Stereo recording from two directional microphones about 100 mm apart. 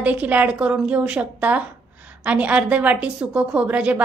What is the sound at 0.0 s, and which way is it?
A woman's voice, 15° right (ahead or behind).